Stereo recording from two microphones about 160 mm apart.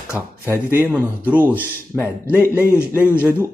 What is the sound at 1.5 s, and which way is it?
Speech, 10° left (ahead or behind).